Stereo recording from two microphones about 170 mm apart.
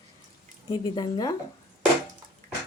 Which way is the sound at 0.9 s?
25° left (ahead or behind).